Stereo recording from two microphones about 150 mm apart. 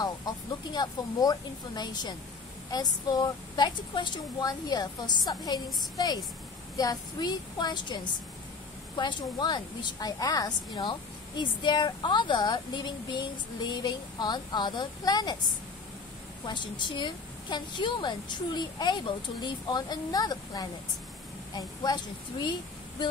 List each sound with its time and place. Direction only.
0.0 s a woman's voice: 25° left (ahead or behind)
16.4 s a woman's voice: 30° left (ahead or behind)